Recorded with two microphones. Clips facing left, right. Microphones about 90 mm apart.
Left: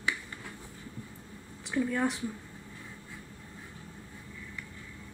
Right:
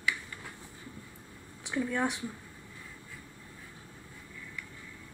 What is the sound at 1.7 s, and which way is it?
Speech, centre (ahead or behind).